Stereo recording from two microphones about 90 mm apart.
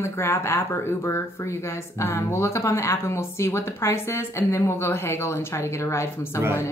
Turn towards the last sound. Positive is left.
turn(degrees=30)  # may be behind; listen again after turning